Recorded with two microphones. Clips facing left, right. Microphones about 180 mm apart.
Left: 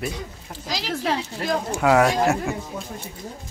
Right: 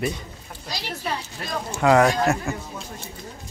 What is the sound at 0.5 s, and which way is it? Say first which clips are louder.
Speech: left 5 dB; 90° left.